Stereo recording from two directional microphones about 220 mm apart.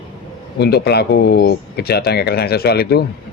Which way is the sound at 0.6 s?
45° left (ahead or behind).